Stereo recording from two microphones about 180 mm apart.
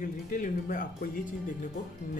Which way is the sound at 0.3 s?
50° left (ahead or behind).